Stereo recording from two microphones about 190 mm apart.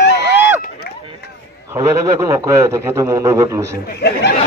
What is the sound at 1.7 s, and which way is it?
A man's voice, 15° right (ahead or behind).